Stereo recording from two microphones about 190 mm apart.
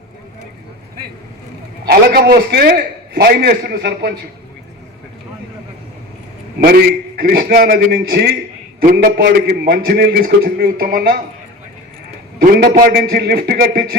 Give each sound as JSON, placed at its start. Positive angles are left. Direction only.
{"t": 1.9, "sound": "a man's voice", "side_deg": -55}
{"t": 6.6, "sound": "a man's voice", "side_deg": -55}
{"t": 12.4, "sound": "a man's voice", "side_deg": -45}